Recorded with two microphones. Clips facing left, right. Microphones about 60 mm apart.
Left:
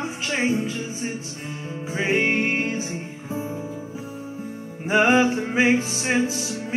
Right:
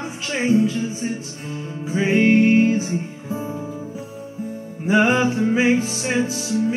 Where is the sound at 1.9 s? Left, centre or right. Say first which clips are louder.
Right 6 dB; left.